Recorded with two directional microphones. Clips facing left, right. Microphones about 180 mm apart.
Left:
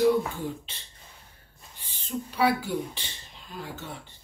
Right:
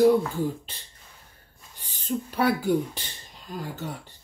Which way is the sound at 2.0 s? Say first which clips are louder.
Right 1 dB; 45° right (ahead or behind).